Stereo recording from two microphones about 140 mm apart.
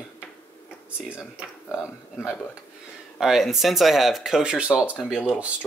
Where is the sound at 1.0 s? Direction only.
5° right (ahead or behind).